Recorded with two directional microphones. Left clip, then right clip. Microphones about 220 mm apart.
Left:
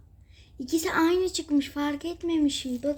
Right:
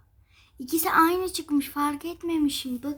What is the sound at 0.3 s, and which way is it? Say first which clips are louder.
A woman's voice: left 1 dB; 10° right (ahead or behind).